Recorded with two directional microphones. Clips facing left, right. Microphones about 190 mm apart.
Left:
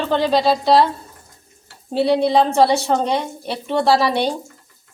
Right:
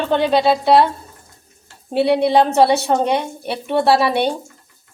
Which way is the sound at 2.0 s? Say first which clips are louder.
Right 1 dB; 60° right (ahead or behind).